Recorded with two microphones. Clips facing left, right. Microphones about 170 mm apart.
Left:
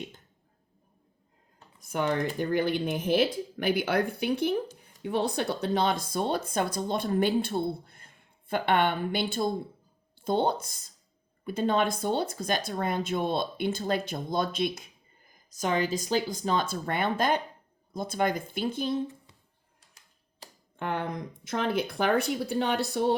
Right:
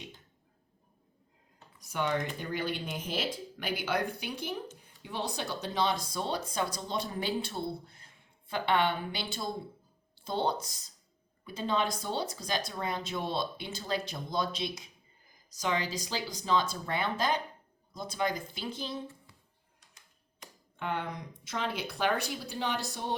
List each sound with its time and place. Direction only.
1.8 s speech: 55° left (ahead or behind)
20.4 s a sound: 30° left (ahead or behind)
20.7 s speech: 55° left (ahead or behind)